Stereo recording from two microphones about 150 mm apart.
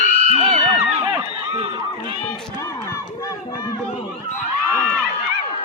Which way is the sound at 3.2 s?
25° left (ahead or behind).